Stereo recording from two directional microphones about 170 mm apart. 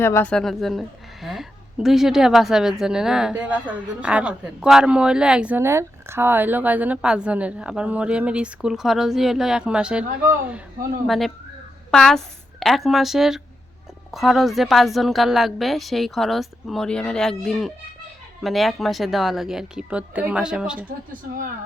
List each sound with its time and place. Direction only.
0.0 s a woman's voice: 10° left (ahead or behind); by 20.8 s 5° right (ahead or behind)
21.1 s speech: 55° right (ahead or behind)